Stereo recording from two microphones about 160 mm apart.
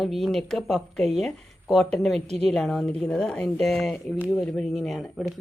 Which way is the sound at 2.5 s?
Centre (ahead or behind).